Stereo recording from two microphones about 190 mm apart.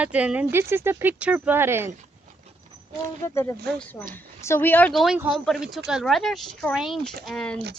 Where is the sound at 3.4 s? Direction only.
10° left (ahead or behind).